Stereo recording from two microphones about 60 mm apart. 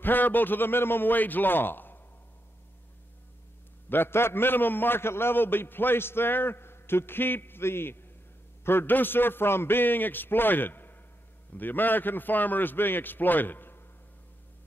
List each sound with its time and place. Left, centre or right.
0.0 s a man's voice: left
3.9 s a man's voice: left